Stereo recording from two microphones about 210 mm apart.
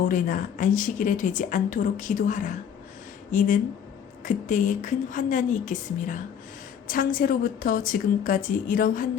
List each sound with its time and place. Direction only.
0.1 s a woman's voice: 40° left (ahead or behind)